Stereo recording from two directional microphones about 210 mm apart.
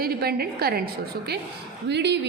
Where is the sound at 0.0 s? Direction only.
45° right (ahead or behind).